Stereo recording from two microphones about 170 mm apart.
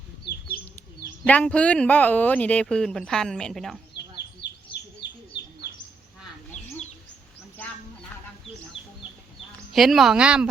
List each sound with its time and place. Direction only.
1.3 s speech: 10° left (ahead or behind)
4.4 s bird: 80° left
9.7 s a woman's voice: centre (ahead or behind)